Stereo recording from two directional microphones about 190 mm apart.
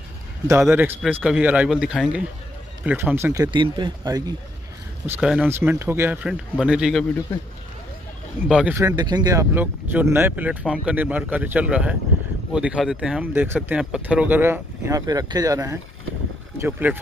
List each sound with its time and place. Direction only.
0.5 s speech: 15° right (ahead or behind)
3.5 s speech: 25° right (ahead or behind)
5.0 s speech: 10° right (ahead or behind)
8.5 s speech: 5° right (ahead or behind)
8.7 s speech: 20° right (ahead or behind)